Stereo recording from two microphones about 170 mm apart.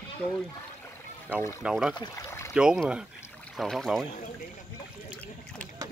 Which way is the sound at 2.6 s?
5° right (ahead or behind).